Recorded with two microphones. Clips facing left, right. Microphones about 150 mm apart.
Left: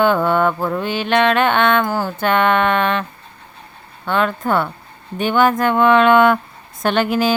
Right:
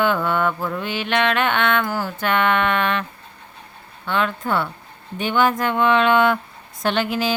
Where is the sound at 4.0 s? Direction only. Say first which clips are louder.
Left 4 dB; 45° left (ahead or behind).